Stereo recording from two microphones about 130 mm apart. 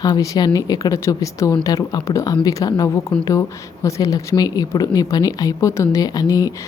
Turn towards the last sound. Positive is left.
turn(degrees=30)  # may be behind; listen again after turning